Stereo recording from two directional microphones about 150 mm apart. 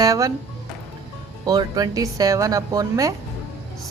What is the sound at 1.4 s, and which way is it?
A woman's voice, 25° right (ahead or behind).